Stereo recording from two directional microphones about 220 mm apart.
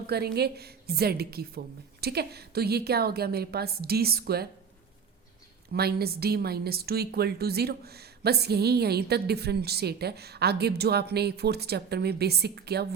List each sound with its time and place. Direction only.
0.1 s a woman's voice: 45° right (ahead or behind)
5.7 s a woman's voice: 45° right (ahead or behind)